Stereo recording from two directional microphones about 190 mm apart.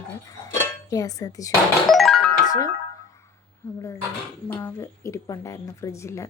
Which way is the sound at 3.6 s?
15° left (ahead or behind).